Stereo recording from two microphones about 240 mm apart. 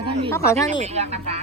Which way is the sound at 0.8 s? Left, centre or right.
Right.